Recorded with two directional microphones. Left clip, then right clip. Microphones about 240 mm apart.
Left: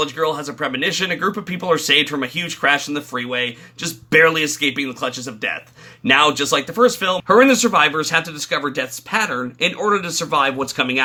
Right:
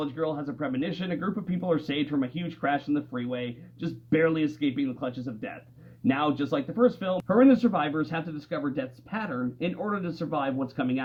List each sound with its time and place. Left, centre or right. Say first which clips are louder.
0.0 s speech: left 10 dB; left